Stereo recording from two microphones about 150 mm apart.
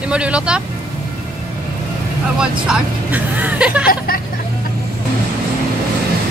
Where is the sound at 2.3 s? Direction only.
10° right (ahead or behind).